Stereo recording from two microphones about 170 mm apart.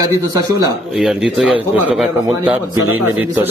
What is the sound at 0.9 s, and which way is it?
A man's voice, centre (ahead or behind).